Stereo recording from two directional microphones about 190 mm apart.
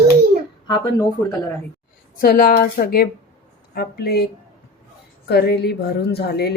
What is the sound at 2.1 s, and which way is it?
A woman's voice, 50° left (ahead or behind).